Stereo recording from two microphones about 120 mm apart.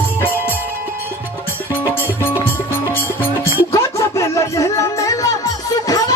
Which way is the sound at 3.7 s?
25° left (ahead or behind).